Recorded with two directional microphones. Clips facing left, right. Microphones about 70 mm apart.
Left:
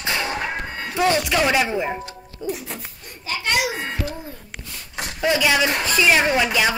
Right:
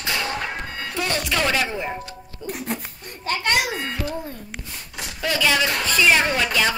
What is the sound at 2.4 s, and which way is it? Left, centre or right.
Speech, right.